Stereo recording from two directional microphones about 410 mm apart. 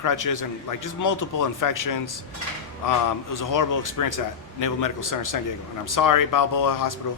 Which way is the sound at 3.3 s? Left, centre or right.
Left.